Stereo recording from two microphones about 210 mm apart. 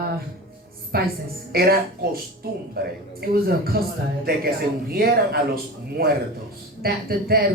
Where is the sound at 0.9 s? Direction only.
45° right (ahead or behind).